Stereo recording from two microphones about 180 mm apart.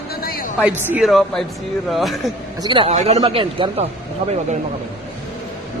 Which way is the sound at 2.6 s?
25° right (ahead or behind).